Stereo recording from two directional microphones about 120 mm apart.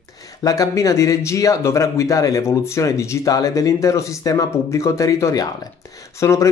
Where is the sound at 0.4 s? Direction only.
30° left (ahead or behind).